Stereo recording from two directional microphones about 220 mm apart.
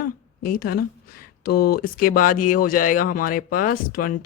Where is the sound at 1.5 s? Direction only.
45° left (ahead or behind).